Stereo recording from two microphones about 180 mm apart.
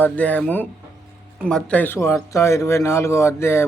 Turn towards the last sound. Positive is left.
turn(degrees=15)  # may be behind; listen again after turning